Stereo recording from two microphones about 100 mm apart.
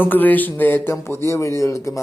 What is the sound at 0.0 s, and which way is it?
Speech, 20° left (ahead or behind).